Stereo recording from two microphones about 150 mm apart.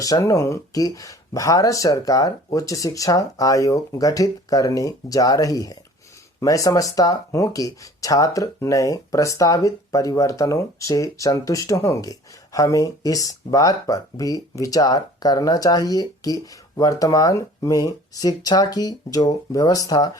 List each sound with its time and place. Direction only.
0.0 s speech: 25° left (ahead or behind)